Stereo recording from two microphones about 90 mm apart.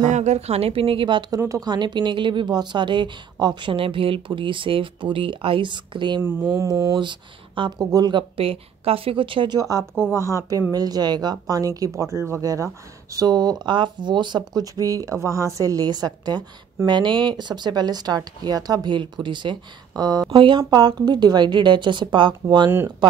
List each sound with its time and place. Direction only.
0.7 s a woman's voice: 90° right; by 1.2 s 70° right (ahead or behind)
1.5 s speech: 50° right (ahead or behind)
3.7 s speech: 85° right; by 6.2 s 60° right (ahead or behind)
6.2 s mantra: 25° right (ahead or behind)
6.6 s speech: 45° right (ahead or behind)
7.0 s speech: 60° right (ahead or behind)
7.8 s speech: 45° right (ahead or behind); by 9.6 s 70° right (ahead or behind)
9.6 s a woman's voice: 40° right (ahead or behind)
10.7 s speech: 45° right (ahead or behind)
20.0 s a woman's voice: 40° right (ahead or behind)
20.3 s speech: 70° right (ahead or behind)
20.7 s speech: 50° right (ahead or behind)